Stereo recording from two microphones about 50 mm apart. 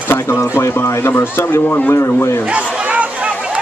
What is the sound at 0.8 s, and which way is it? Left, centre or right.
A man's voice, left.